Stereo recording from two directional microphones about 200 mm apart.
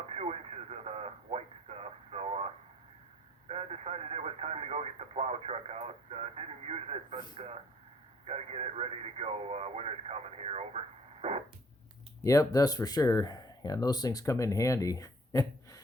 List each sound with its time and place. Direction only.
0.1 s radio: 30° right (ahead or behind)
3.5 s radio: 30° right (ahead or behind)
7.3 s a sound: 30° right (ahead or behind)
8.3 s radio: 30° right (ahead or behind)
12.2 s speech: 15° left (ahead or behind)